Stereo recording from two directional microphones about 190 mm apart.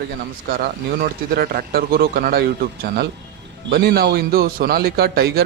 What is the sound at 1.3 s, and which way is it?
A man's voice, 55° right (ahead or behind).